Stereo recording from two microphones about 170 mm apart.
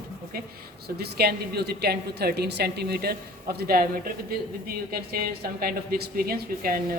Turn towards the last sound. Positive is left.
turn(degrees=-60)  # may be behind; listen again after turning